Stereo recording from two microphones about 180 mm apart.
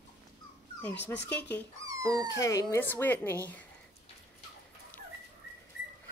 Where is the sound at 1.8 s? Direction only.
20° right (ahead or behind).